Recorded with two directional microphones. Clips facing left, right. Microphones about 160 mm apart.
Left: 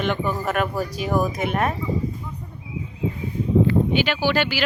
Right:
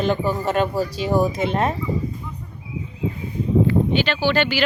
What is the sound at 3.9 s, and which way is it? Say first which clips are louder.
Speech: right 1 dB; 10° left (ahead or behind).